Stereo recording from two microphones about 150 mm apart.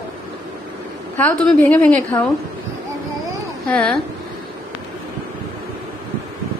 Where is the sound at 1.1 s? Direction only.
10° left (ahead or behind).